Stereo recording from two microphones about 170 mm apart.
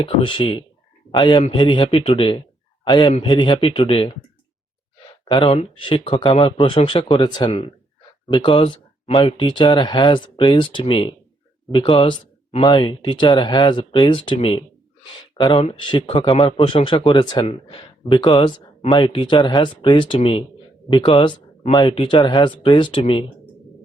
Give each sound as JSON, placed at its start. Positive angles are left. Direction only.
{"t": 0.0, "sound": "a man's voice", "side_deg": 30}
{"t": 5.3, "sound": "a man's voice", "side_deg": 30}